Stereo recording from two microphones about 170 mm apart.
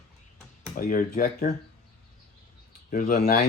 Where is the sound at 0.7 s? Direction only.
55° left (ahead or behind).